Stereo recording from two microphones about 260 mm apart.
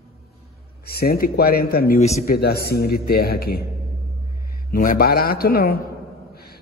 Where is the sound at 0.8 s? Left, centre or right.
Left.